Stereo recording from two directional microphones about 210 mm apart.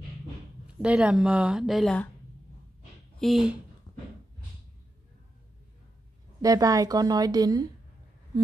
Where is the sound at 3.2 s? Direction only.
Centre (ahead or behind).